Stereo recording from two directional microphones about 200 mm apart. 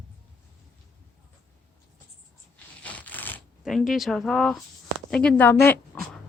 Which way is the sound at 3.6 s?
Centre (ahead or behind).